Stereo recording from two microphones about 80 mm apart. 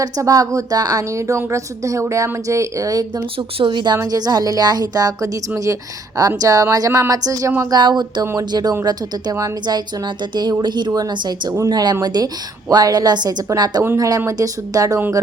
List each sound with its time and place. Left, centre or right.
0.0 s a woman's voice: right
3.6 s a woman's voice: right
3.9 s a woman's voice: right
7.7 s a woman's voice: right
11.5 s a woman's voice: right
13.8 s a woman's voice: right